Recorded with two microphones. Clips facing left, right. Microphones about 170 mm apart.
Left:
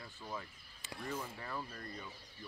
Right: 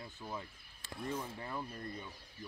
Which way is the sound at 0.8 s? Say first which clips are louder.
Right 2 dB; centre (ahead or behind).